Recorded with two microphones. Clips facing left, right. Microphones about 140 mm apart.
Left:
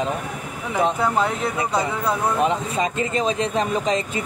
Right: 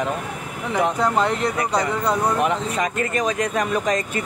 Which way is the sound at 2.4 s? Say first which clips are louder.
Even; 25° left (ahead or behind).